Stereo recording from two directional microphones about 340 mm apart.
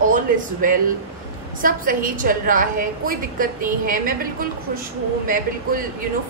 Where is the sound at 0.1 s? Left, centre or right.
Right.